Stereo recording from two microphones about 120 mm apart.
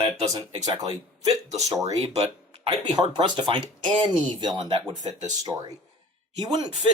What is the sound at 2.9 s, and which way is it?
Speech, 40° right (ahead or behind).